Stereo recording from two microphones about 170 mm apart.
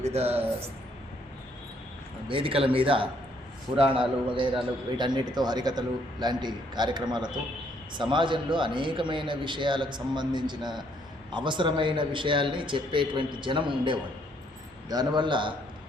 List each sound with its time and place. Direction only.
0.0 s speech: 35° right (ahead or behind)
2.2 s a man's voice: 30° right (ahead or behind)